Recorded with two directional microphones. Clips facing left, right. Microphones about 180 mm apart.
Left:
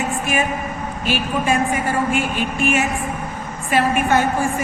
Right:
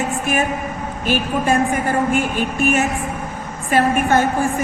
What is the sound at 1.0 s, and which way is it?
A woman's voice, 50° right (ahead or behind).